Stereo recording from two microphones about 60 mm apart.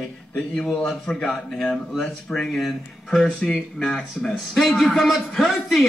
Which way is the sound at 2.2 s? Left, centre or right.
Centre.